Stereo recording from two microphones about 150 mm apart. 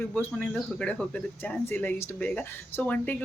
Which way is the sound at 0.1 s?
10° left (ahead or behind).